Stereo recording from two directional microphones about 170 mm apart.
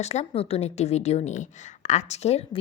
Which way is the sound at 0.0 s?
40° left (ahead or behind).